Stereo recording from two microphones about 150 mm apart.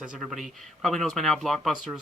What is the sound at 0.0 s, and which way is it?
Speech, 5° right (ahead or behind).